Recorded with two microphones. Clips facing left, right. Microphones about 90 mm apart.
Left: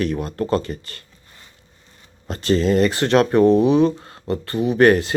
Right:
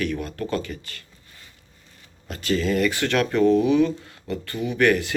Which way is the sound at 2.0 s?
35° left (ahead or behind).